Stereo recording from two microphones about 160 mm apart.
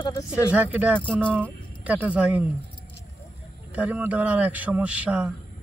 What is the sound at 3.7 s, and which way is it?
A man's voice, 10° right (ahead or behind).